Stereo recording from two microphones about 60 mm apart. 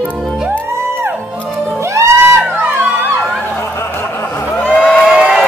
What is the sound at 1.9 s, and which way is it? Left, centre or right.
Music, right.